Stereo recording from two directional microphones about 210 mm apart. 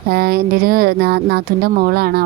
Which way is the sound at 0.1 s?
45° right (ahead or behind).